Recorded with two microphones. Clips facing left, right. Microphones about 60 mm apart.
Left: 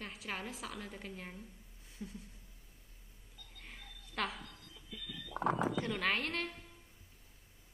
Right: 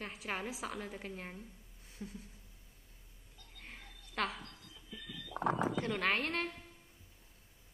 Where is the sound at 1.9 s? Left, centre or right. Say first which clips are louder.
Even; centre.